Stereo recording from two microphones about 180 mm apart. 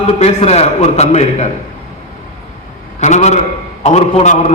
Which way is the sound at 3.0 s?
40° left (ahead or behind).